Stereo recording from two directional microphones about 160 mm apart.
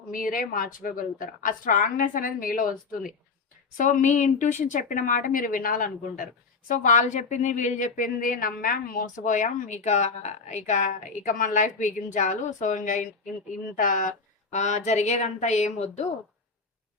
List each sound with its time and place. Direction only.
0.1 s a woman's voice: 60° left (ahead or behind)